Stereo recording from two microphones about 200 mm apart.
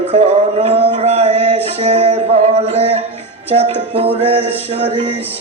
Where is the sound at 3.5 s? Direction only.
30° right (ahead or behind).